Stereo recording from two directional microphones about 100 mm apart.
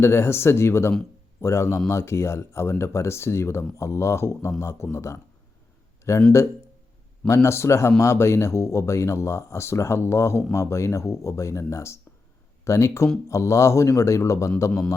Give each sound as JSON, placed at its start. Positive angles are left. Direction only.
{"t": 0.0, "sound": "speech", "side_deg": 25}
{"t": 7.3, "sound": "speech", "side_deg": 30}